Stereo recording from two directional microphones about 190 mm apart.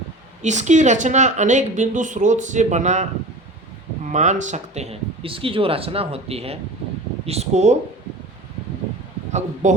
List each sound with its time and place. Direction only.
0.4 s speech: 40° right (ahead or behind)
4.1 s speech: 40° right (ahead or behind)
9.6 s speech: 40° right (ahead or behind)